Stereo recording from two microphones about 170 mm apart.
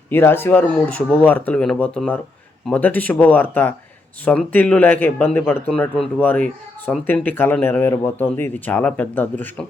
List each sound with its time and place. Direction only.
0.1 s a man's voice: 15° left (ahead or behind)